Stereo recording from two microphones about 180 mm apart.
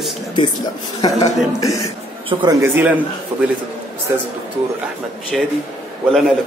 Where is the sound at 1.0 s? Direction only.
20° left (ahead or behind).